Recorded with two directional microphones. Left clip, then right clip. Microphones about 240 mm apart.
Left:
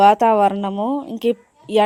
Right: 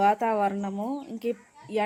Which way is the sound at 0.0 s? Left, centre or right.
Left.